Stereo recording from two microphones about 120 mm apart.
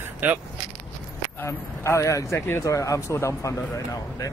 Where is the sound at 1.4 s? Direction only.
25° left (ahead or behind).